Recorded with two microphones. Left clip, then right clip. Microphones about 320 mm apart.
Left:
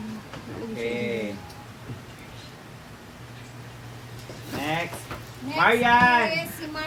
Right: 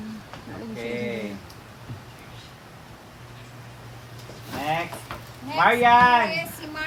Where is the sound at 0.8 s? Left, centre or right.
Right.